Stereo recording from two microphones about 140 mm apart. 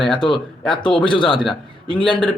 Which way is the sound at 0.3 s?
Centre (ahead or behind).